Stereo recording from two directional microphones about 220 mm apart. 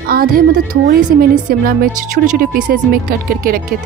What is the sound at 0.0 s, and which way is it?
A woman's voice, 40° right (ahead or behind).